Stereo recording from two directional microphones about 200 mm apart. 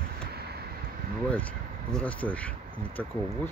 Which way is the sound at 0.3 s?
50° right (ahead or behind).